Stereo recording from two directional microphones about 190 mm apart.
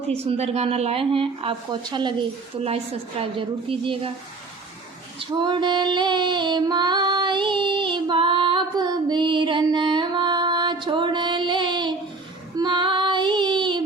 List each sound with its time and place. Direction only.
0.3 s a woman's voice: 35° right (ahead or behind)
5.2 s female singing: 25° right (ahead or behind)
12.5 s child singing: 25° right (ahead or behind)